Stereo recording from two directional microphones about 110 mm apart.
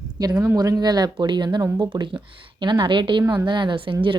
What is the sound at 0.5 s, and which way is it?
A woman's voice, 35° right (ahead or behind).